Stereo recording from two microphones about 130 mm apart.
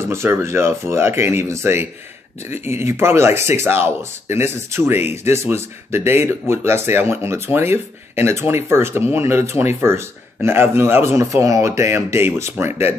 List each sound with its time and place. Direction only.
0.0 s speech: 20° right (ahead or behind)